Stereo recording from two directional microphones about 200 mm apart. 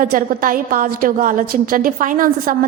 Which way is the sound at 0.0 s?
45° right (ahead or behind).